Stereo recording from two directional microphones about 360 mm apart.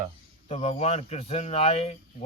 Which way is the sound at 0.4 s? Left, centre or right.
Centre.